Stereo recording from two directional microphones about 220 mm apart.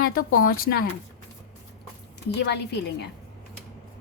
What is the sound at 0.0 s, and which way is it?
Speech, 45° left (ahead or behind).